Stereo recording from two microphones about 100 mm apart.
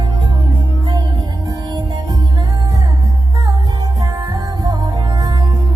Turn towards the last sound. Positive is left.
turn(degrees=-45)  # may be behind; listen again after turning